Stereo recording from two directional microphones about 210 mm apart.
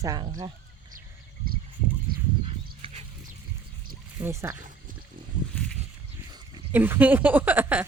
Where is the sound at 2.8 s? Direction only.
25° right (ahead or behind).